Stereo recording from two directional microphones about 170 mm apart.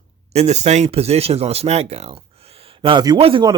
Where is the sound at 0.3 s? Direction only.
40° right (ahead or behind).